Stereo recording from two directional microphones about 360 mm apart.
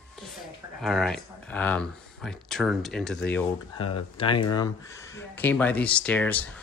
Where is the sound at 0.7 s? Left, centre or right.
Centre.